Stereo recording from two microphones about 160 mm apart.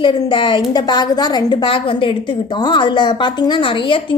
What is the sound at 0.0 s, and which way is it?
A woman's voice, 30° left (ahead or behind).